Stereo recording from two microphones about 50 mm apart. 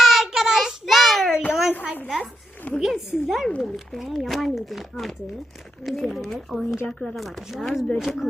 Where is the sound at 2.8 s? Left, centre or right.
Centre.